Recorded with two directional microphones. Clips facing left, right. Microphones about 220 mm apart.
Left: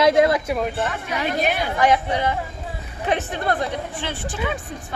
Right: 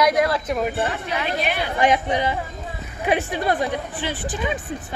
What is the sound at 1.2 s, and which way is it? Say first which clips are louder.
Speech: left 4 dB; 45° left (ahead or behind).